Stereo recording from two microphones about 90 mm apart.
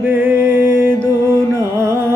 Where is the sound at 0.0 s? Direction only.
25° right (ahead or behind).